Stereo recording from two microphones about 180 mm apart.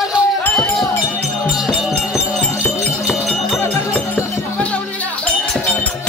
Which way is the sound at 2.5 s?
15° left (ahead or behind).